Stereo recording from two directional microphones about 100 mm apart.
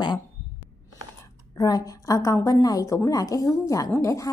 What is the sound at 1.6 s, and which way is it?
Speech, 35° left (ahead or behind).